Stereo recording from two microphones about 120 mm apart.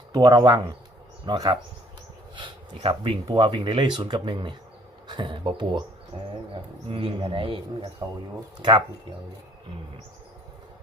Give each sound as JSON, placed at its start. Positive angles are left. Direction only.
{"t": 0.1, "sound": "speech", "side_deg": -35}